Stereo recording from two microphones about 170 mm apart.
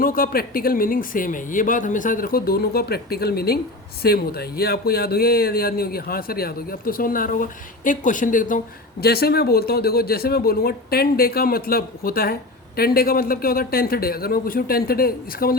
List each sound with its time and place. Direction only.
0.0 s speech: 60° left (ahead or behind)